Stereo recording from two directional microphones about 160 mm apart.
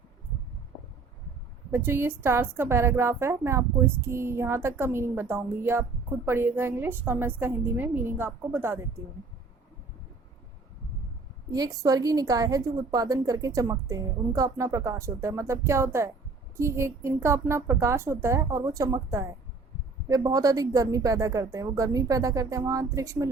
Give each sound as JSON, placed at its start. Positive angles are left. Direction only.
{"t": 1.7, "sound": "a woman's voice", "side_deg": -15}
{"t": 11.5, "sound": "a woman's voice", "side_deg": -20}